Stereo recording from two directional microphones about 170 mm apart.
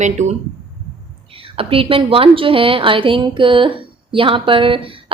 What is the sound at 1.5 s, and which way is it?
A woman's voice, 35° right (ahead or behind).